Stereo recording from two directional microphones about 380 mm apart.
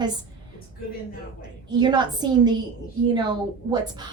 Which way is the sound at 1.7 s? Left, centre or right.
Centre.